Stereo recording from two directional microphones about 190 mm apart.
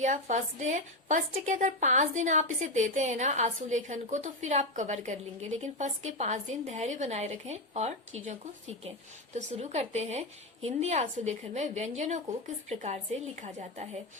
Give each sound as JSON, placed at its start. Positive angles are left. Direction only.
{"t": 0.0, "sound": "a woman's voice", "side_deg": -40}